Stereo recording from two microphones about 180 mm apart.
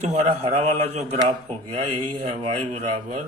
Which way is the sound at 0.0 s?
35° right (ahead or behind).